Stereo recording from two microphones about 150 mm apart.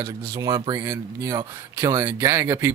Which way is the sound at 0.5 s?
35° right (ahead or behind).